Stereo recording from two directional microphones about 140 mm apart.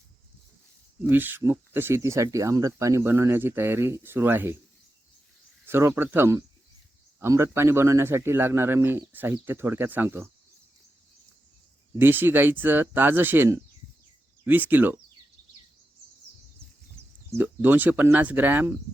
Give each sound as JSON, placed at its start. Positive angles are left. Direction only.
{"t": 1.0, "sound": "speech", "side_deg": -15}
{"t": 5.6, "sound": "speech", "side_deg": -15}
{"t": 11.9, "sound": "speech", "side_deg": -15}
{"t": 17.3, "sound": "speech", "side_deg": -15}